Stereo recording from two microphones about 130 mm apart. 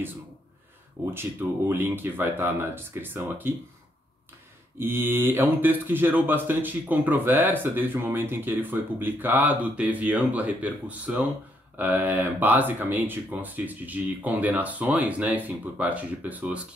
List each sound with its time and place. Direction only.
1.1 s speech: 15° right (ahead or behind)
4.7 s speech: 15° right (ahead or behind)